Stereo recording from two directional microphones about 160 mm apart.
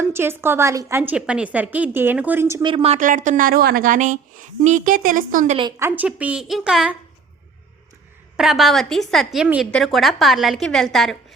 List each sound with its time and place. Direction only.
0.0 s a woman's voice: 15° right (ahead or behind)
2.6 s speech: 35° right (ahead or behind)
3.0 s a woman's voice: 55° right (ahead or behind)
5.8 s a woman's voice: 10° right (ahead or behind)
8.4 s a woman's voice: centre (ahead or behind)